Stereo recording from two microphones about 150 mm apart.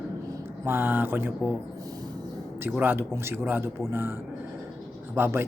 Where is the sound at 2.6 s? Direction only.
10° right (ahead or behind).